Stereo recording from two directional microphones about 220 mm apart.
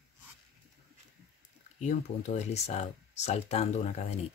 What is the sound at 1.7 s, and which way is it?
Speech, 30° left (ahead or behind).